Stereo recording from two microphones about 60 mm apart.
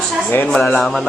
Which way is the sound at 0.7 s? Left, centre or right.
Centre.